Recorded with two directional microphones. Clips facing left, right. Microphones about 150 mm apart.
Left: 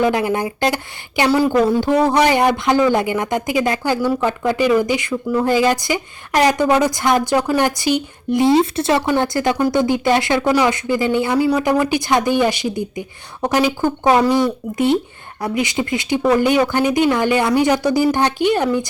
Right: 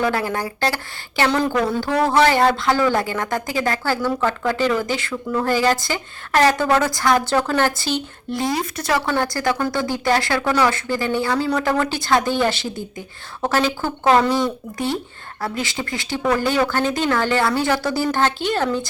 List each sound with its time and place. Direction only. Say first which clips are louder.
0.0 s a woman's voice: left 4 dB; 15° left (ahead or behind)